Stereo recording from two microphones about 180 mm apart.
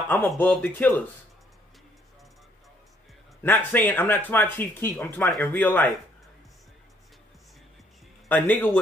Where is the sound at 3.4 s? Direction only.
10° left (ahead or behind).